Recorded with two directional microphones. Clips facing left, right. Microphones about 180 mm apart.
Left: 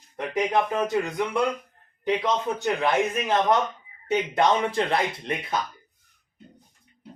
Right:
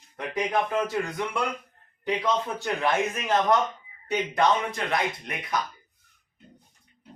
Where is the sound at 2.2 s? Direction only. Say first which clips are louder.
Left 2 dB; 20° left (ahead or behind).